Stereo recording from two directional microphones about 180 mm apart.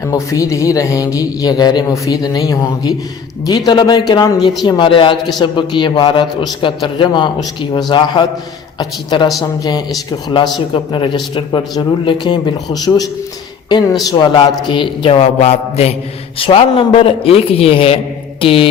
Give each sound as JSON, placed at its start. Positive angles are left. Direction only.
{"t": 0.0, "sound": "a man's voice", "side_deg": 20}